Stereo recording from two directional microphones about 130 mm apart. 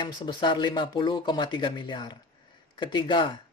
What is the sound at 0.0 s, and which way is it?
Speech, 35° left (ahead or behind).